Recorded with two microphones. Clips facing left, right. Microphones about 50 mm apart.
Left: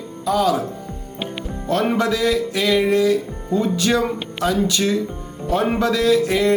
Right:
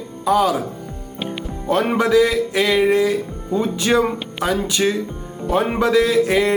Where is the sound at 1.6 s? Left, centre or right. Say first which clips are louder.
Right 1 dB; centre.